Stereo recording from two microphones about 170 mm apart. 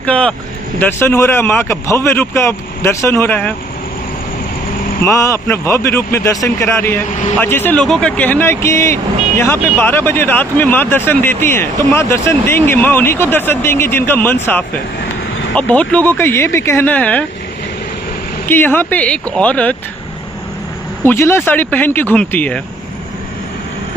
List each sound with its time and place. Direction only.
0.0 s speech: 5° left (ahead or behind)
5.0 s speech: 15° left (ahead or behind)
18.4 s speech: 10° left (ahead or behind)
21.1 s speech: 15° left (ahead or behind)